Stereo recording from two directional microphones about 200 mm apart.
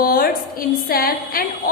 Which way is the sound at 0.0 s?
45° left (ahead or behind).